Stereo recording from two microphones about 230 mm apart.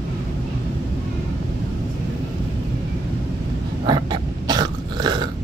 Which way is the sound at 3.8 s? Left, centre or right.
Centre.